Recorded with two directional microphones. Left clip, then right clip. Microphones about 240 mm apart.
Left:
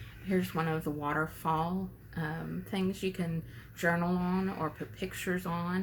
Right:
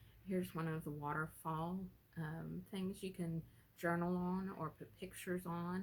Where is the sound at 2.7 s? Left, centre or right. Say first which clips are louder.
Left 13 dB; right.